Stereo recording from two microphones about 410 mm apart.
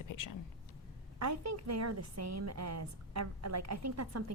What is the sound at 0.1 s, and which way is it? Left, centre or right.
Speech, left.